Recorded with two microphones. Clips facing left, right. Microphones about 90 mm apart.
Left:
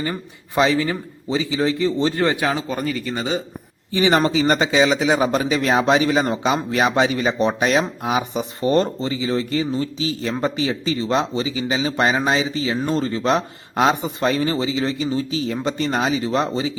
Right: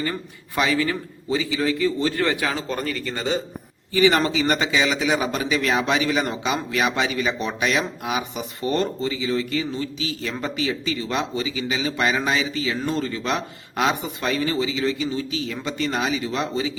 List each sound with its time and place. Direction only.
0.0 s a man's voice: 25° left (ahead or behind)
2.6 s a man's voice: 10° left (ahead or behind)
3.9 s speech: 25° left (ahead or behind)